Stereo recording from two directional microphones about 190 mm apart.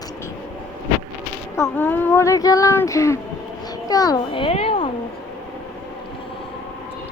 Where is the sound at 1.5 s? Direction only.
10° left (ahead or behind); by 4.9 s 30° left (ahead or behind).